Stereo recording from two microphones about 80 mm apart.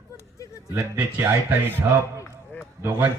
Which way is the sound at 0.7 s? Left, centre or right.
Right.